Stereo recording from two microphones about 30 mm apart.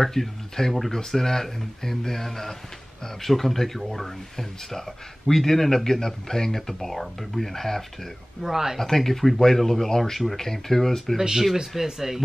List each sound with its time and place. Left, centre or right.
0.0 s speech: centre
6.7 s speech: centre
8.4 s speech: centre
8.7 s speech: centre
11.1 s speech: centre